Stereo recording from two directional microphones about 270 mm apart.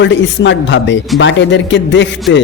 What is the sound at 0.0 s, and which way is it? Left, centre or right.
A man's voice, left.